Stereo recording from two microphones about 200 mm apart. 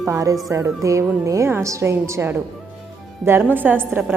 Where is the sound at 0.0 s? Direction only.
15° right (ahead or behind).